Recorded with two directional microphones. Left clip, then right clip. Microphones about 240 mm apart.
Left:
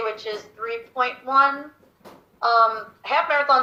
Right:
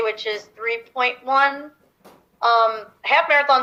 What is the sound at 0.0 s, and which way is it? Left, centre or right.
Speech, right.